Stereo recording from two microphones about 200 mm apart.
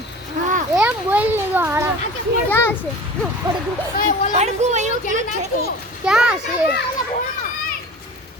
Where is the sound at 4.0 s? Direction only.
40° left (ahead or behind).